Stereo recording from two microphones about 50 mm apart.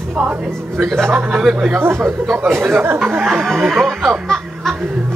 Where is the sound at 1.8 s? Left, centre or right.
Right.